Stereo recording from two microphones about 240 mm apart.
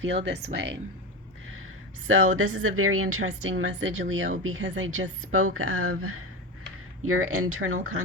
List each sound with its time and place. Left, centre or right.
0.0 s speech: right
2.0 s a woman's voice: right